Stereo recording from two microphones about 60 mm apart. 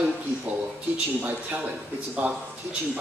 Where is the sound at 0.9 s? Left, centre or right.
Right.